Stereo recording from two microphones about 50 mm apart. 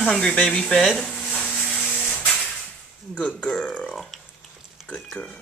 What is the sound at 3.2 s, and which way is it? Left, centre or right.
Speech, left.